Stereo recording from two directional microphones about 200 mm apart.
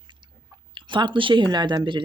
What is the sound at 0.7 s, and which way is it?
Speech, 25° right (ahead or behind).